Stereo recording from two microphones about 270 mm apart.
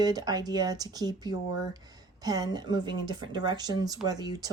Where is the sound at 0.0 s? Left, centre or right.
Centre.